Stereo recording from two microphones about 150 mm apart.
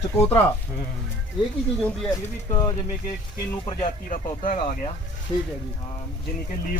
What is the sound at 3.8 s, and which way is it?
Speech, 55° left (ahead or behind).